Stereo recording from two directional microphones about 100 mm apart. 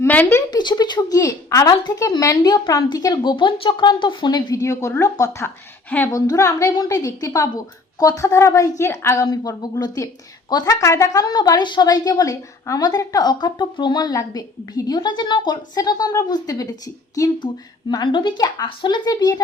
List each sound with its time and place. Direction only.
0.1 s speech: 20° left (ahead or behind)
0.5 s speech: 45° left (ahead or behind)
1.2 s a woman's voice: 30° left (ahead or behind)
3.3 s speech: 55° left (ahead or behind)
4.6 s a woman's voice: 30° left (ahead or behind); by 18.4 s 50° left (ahead or behind)
18.4 s a woman's voice: 40° left (ahead or behind)
18.8 s speech: 50° left (ahead or behind)